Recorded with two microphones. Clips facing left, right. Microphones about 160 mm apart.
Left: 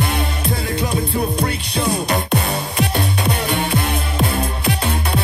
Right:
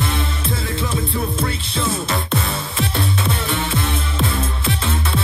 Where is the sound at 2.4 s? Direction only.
45° left (ahead or behind).